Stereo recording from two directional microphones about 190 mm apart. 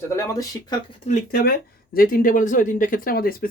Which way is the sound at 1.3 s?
50° left (ahead or behind).